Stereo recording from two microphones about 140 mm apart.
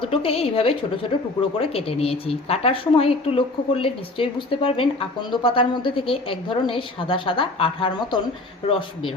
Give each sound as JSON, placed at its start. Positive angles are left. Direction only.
{"t": 0.0, "sound": "a woman's voice", "side_deg": 40}